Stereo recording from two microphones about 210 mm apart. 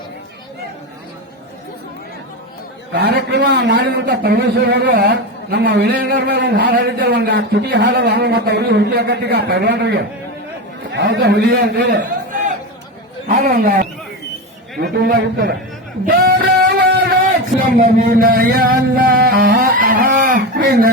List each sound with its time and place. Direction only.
2.9 s a man's voice: 55° right (ahead or behind)
13.2 s a man's voice: 45° right (ahead or behind)
17.8 s a sound: 40° right (ahead or behind)